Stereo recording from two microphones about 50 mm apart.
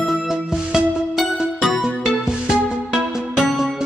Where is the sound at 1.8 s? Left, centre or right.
Centre.